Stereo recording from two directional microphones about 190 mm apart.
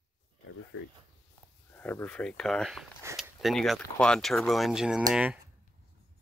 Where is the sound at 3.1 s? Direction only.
Centre (ahead or behind).